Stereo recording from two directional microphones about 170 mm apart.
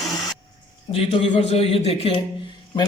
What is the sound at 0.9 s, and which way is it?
A man's voice, 35° left (ahead or behind).